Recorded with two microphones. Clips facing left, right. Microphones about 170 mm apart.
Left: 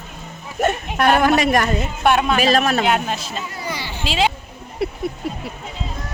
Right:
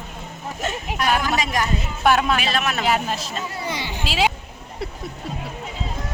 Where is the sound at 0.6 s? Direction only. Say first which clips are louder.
Left 7 dB; 60° left (ahead or behind).